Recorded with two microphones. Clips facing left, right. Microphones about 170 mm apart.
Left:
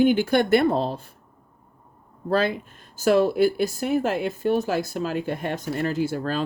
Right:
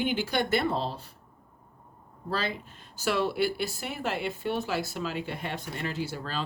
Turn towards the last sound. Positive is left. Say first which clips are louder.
# left 9 dB
turn(degrees=50)  # may be behind; listen again after turning